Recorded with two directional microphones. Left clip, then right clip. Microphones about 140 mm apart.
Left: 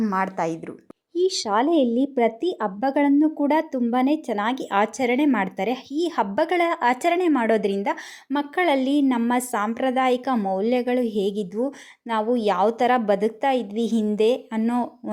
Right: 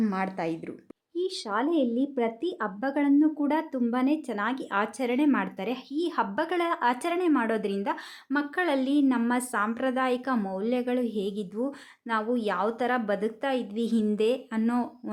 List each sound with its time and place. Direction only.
0.0 s a woman's voice: centre (ahead or behind)
1.1 s speech: 40° left (ahead or behind); by 15.1 s 25° left (ahead or behind)